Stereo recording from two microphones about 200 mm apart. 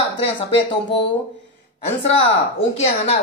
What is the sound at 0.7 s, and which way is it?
Speech, 25° left (ahead or behind).